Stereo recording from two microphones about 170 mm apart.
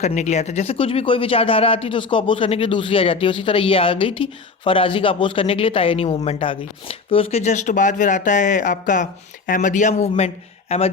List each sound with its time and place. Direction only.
0.0 s speech: 45° left (ahead or behind)